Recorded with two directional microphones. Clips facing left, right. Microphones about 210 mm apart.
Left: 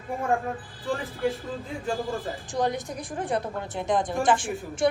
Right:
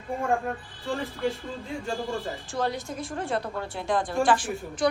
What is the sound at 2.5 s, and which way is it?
A woman's voice, 20° left (ahead or behind).